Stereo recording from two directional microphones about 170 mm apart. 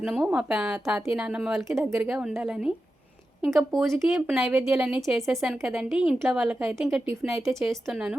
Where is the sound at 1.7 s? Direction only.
15° right (ahead or behind).